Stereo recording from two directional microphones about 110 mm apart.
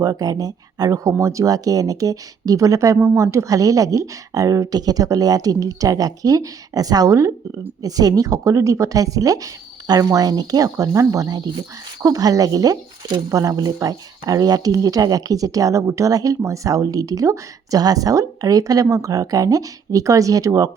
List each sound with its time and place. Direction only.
0.0 s speech: 35° right (ahead or behind)